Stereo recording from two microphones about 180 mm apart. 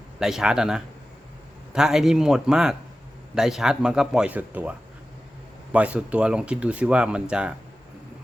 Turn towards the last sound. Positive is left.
turn(degrees=-5)  # may be behind; listen again after turning